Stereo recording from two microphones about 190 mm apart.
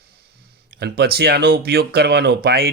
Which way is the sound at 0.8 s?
60° right (ahead or behind).